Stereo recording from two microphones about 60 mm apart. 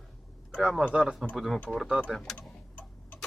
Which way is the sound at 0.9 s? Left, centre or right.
Centre.